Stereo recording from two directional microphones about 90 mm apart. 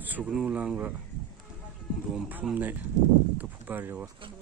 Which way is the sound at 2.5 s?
20° right (ahead or behind).